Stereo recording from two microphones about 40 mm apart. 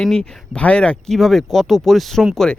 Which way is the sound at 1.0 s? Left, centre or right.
Centre.